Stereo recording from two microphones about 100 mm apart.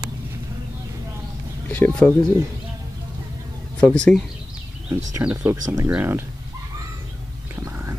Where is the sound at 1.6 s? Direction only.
15° left (ahead or behind).